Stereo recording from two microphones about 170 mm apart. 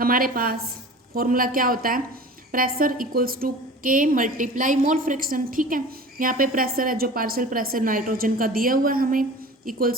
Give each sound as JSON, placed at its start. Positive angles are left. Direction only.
{"t": 0.0, "sound": "a woman's voice", "side_deg": -55}